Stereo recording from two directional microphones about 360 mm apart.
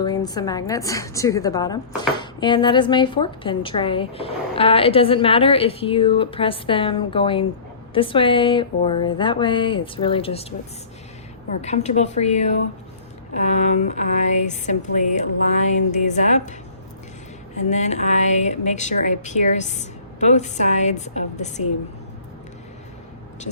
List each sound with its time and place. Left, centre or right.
0.0 s a woman's voice: centre
11.6 s speech: centre
17.6 s speech: centre